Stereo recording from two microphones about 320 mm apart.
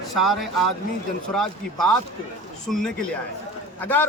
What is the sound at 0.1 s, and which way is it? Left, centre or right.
A man's voice, centre.